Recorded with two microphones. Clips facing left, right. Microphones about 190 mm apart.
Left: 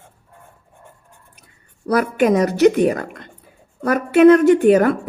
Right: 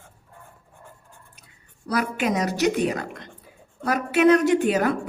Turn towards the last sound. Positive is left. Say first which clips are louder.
# left 8 dB
turn(degrees=55)  # may be behind; listen again after turning